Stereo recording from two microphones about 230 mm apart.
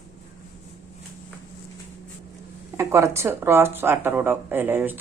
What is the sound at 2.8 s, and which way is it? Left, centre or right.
Speech, centre.